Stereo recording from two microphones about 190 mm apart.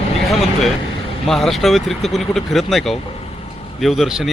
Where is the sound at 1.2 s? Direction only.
Centre (ahead or behind).